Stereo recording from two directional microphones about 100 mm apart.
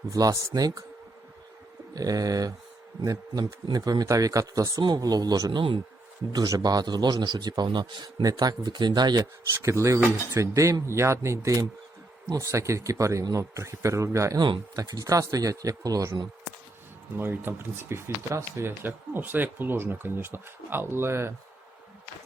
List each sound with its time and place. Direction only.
0.1 s a man's voice: 35° right (ahead or behind)
1.9 s a man's voice: 40° right (ahead or behind); by 5.8 s 55° right (ahead or behind)
6.3 s a man's voice: 40° right (ahead or behind)
9.6 s a man's voice: 30° right (ahead or behind)
17.2 s speech: 20° right (ahead or behind)